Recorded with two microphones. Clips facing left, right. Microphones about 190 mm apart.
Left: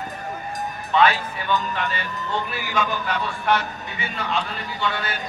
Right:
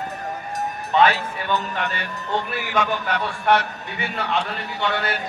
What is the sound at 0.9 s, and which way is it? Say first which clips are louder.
Speech: right 1 dB; 45° right (ahead or behind).